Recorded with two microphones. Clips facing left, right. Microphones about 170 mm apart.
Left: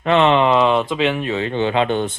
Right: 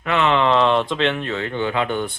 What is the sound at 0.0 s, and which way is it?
Speech, 25° left (ahead or behind).